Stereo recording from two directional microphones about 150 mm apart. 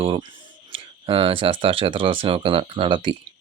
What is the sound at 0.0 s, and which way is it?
Speech, 35° right (ahead or behind).